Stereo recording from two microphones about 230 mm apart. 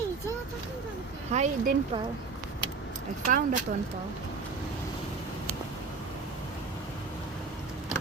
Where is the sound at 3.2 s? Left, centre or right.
Right.